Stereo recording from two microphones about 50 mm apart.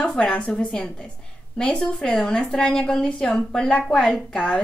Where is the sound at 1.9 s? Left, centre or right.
Left.